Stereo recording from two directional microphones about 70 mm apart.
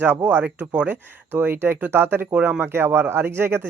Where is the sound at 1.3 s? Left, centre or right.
Right.